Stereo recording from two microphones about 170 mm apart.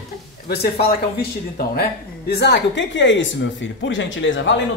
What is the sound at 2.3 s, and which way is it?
Speech, 75° left (ahead or behind).